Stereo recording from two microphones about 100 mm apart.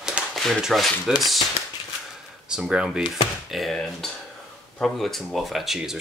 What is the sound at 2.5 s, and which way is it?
Speech, 10° right (ahead or behind).